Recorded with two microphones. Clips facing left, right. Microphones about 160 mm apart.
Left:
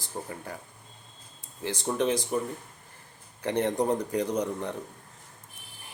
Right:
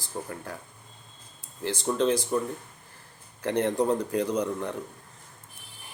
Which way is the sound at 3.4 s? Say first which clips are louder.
Right 1 dB; 20° left (ahead or behind).